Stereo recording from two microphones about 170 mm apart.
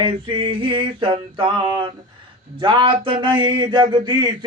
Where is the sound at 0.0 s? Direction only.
30° right (ahead or behind).